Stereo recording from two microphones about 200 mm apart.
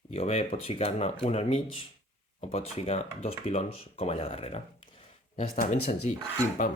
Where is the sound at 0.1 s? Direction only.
35° left (ahead or behind).